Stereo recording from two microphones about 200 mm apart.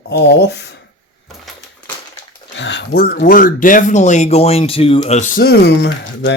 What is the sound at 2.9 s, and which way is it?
Speech, 50° left (ahead or behind).